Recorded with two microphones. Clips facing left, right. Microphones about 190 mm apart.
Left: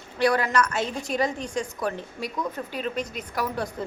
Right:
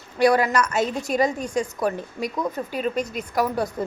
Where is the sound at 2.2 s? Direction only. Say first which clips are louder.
Right 5 dB; 45° right (ahead or behind).